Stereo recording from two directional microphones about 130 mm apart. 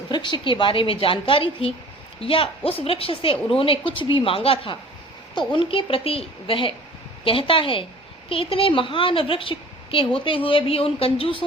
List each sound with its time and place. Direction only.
0.1 s a woman's voice: 35° left (ahead or behind)